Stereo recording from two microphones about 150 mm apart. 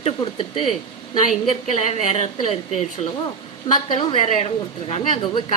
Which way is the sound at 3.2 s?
30° left (ahead or behind).